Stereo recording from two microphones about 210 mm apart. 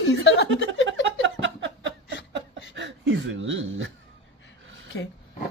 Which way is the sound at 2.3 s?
60° right (ahead or behind).